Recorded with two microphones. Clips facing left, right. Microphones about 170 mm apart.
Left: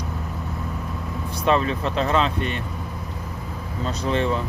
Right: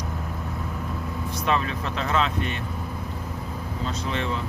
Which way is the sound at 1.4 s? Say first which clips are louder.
Left 5 dB; 35° left (ahead or behind).